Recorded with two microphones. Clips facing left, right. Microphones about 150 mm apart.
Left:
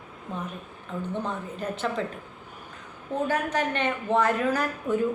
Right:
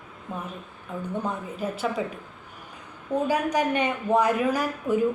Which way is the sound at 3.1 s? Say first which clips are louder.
Right 3 dB; 10° right (ahead or behind).